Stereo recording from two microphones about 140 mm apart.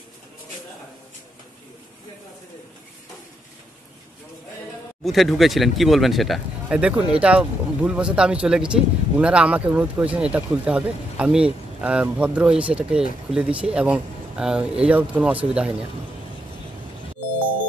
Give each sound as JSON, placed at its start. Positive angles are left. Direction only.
{"t": 5.0, "sound": "speech", "side_deg": 0}